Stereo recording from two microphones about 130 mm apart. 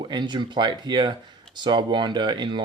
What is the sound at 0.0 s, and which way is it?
Speech, 35° right (ahead or behind).